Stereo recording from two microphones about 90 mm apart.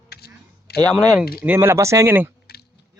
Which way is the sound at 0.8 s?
15° left (ahead or behind).